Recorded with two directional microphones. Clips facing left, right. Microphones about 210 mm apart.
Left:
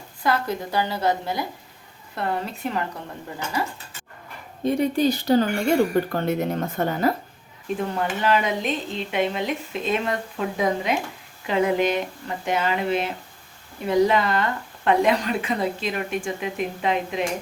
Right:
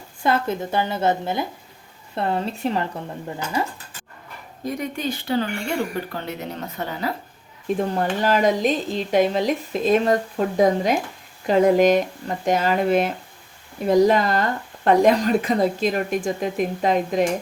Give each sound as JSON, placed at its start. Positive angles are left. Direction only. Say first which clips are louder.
{"t": 0.2, "sound": "a woman's voice", "louder": "right 2 dB", "side_deg": -25}
{"t": 4.6, "sound": "speech", "louder": "left 6 dB", "side_deg": 30}
{"t": 7.9, "sound": "speech", "louder": "even", "side_deg": -40}